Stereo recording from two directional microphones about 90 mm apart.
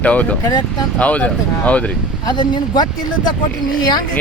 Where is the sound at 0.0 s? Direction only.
15° left (ahead or behind).